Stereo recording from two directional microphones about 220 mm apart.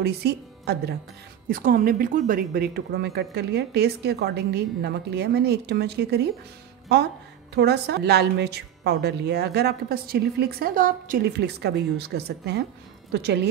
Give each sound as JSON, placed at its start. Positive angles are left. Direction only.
{"t": 0.0, "sound": "a woman's voice", "side_deg": -45}
{"t": 7.5, "sound": "a woman's voice", "side_deg": -50}